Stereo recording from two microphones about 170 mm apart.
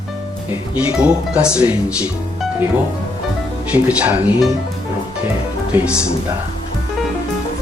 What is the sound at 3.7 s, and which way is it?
Speech, 10° right (ahead or behind).